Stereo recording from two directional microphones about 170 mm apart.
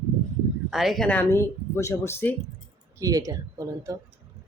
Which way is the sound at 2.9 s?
20° right (ahead or behind).